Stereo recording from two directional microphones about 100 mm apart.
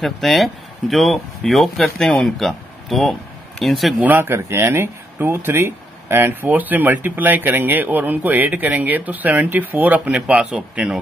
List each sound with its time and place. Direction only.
0.0 s speech: centre (ahead or behind)
4.0 s speech: 20° right (ahead or behind)